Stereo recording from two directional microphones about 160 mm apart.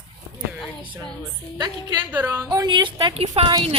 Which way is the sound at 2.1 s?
10° right (ahead or behind).